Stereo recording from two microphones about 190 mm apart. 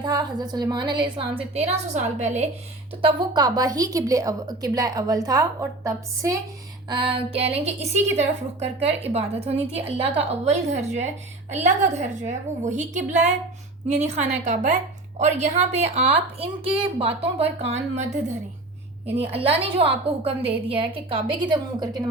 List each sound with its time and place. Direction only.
0.0 s a woman's voice: 20° right (ahead or behind); by 2.5 s 35° right (ahead or behind)
3.0 s a woman's voice: 25° right (ahead or behind)